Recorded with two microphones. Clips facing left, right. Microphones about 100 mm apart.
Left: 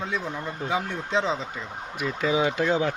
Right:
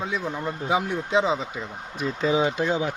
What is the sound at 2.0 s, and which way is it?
Speech, 25° right (ahead or behind).